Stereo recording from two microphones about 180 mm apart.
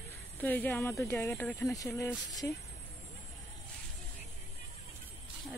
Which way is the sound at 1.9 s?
15° left (ahead or behind).